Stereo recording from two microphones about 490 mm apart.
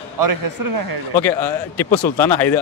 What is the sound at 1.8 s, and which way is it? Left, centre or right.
Speech, centre.